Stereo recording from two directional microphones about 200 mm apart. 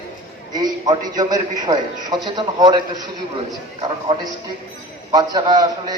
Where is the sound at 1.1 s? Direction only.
20° right (ahead or behind).